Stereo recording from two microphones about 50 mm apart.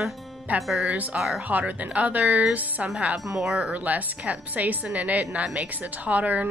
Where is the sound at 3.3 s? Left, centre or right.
Centre.